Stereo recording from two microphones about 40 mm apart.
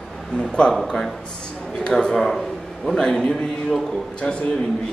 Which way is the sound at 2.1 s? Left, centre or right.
Centre.